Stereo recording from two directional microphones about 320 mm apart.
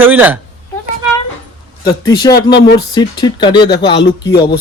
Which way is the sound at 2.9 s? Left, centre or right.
Centre.